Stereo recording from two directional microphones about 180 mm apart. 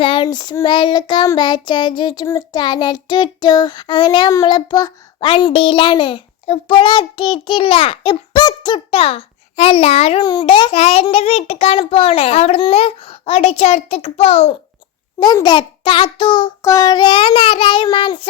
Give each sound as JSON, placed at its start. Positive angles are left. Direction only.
{"t": 0.0, "sound": "child singing", "side_deg": 30}
{"t": 15.2, "sound": "child singing", "side_deg": 25}